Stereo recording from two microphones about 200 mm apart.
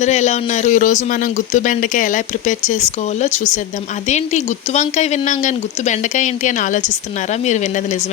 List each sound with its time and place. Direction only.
0.0 s speech: 35° left (ahead or behind)